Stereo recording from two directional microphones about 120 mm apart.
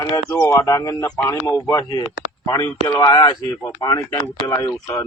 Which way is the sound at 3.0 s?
35° left (ahead or behind).